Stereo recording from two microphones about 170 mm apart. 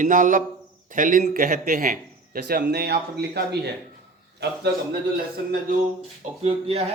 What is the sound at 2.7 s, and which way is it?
Speech, 70° right (ahead or behind).